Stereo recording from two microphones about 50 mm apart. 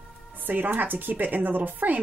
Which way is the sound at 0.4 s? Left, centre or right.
Right.